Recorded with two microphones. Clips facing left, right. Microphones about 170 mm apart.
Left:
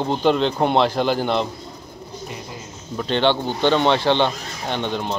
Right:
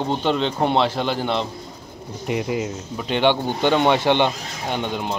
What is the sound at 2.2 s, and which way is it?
Speech, 70° right (ahead or behind).